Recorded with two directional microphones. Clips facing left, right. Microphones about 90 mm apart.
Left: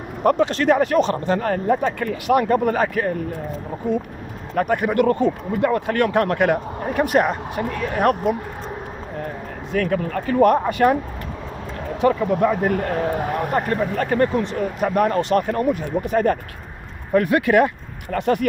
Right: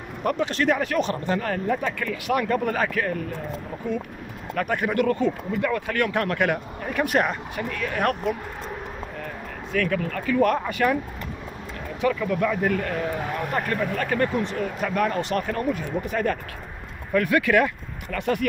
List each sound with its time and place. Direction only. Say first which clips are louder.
0.2 s speech: left 6 dB; 40° left (ahead or behind)
4.6 s speech: left 5 dB; 30° left (ahead or behind)
9.2 s speech: left 4 dB; 35° left (ahead or behind)
12.0 s speech: left 5 dB; 35° left (ahead or behind)